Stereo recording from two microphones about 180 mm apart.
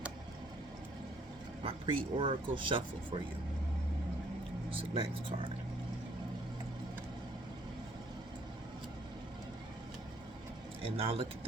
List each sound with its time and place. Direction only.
1.6 s speech: 30° right (ahead or behind)
4.7 s speech: 30° right (ahead or behind)
10.9 s speech: 30° right (ahead or behind)